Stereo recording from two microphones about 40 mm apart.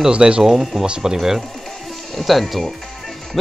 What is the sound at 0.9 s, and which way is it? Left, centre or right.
Speech, centre.